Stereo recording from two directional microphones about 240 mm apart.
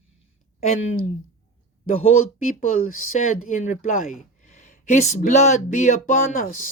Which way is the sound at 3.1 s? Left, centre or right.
Left.